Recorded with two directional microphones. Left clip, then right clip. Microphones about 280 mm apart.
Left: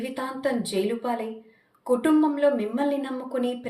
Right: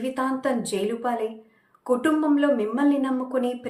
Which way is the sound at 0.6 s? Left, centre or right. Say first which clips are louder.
Right 1 dB; centre.